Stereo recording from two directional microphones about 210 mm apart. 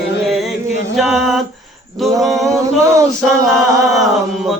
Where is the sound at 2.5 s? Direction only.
15° right (ahead or behind).